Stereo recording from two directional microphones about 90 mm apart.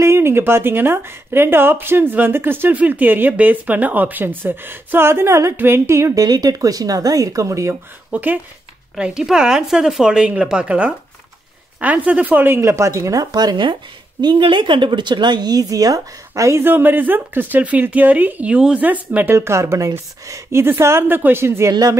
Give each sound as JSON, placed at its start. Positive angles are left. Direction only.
{"t": 0.0, "sound": "speech", "side_deg": -30}
{"t": 6.2, "sound": "speech", "side_deg": -45}
{"t": 8.1, "sound": "speech", "side_deg": -20}
{"t": 8.9, "sound": "a woman's voice", "side_deg": -10}
{"t": 19.3, "sound": "speech", "side_deg": -30}